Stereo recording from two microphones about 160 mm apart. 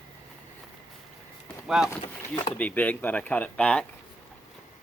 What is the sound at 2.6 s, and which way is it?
Speech, 10° left (ahead or behind).